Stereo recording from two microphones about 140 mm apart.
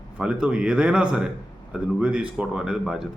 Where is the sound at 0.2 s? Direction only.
5° right (ahead or behind).